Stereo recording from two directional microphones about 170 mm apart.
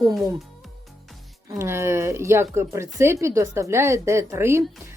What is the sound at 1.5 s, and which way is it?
Speech, 15° right (ahead or behind).